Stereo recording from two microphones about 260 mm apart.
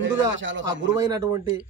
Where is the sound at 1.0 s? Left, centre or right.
Centre.